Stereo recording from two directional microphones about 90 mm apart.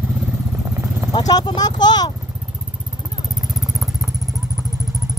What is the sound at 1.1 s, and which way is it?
Speech, 50° left (ahead or behind).